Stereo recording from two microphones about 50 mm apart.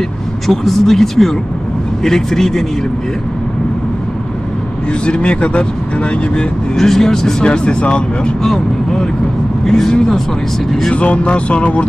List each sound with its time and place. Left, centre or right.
0.5 s speech: centre
5.0 s speech: left
7.4 s speech: left
8.4 s speech: centre
10.9 s speech: left